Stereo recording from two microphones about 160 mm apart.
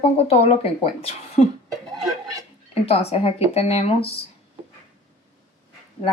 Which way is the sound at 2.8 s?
40° left (ahead or behind).